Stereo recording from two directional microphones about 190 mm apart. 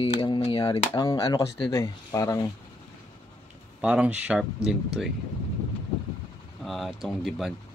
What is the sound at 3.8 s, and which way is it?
Speech, 5° right (ahead or behind).